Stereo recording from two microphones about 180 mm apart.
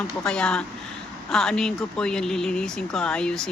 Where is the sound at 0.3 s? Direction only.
5° left (ahead or behind).